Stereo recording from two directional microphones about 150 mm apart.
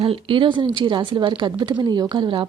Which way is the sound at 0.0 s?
35° right (ahead or behind).